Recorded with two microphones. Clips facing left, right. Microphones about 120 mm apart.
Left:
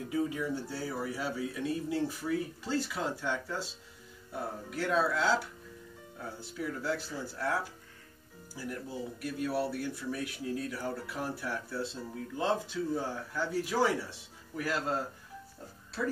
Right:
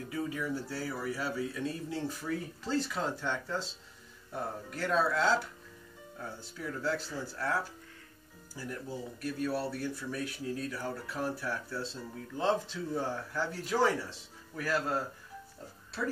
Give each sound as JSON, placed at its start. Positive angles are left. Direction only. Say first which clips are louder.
{"t": 0.1, "sound": "speech", "louder": "left 3 dB", "side_deg": 20}
{"t": 6.6, "sound": "speech", "louder": "even", "side_deg": 10}
{"t": 9.2, "sound": "speech", "louder": "left 1 dB", "side_deg": 15}